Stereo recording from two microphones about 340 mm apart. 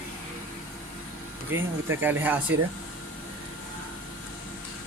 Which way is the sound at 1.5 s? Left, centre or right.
Centre.